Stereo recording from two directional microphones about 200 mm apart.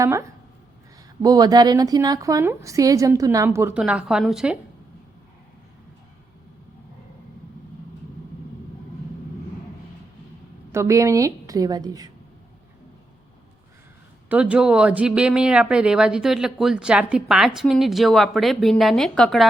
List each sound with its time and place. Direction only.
0.0 s a woman's voice: 15° right (ahead or behind)
10.7 s a woman's voice: 15° right (ahead or behind)
14.3 s a woman's voice: 5° right (ahead or behind)